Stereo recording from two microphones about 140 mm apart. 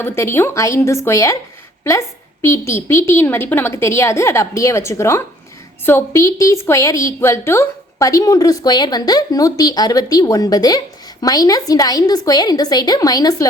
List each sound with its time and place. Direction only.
0.0 s a woman's voice: 15° left (ahead or behind)